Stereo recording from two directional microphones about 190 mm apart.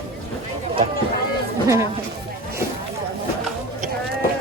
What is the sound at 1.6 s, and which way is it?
Speech, 15° right (ahead or behind).